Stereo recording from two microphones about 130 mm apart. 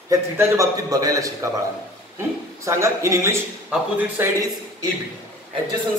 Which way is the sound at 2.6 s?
20° right (ahead or behind).